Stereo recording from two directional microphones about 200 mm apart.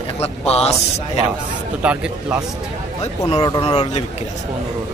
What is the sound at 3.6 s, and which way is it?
Speech, 30° left (ahead or behind).